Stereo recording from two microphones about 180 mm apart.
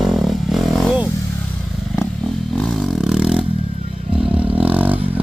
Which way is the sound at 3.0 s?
Centre (ahead or behind).